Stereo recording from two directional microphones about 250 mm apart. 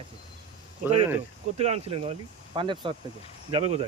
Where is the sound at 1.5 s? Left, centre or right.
Right.